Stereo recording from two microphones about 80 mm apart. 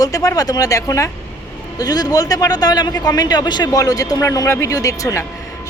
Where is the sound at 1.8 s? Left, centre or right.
Left.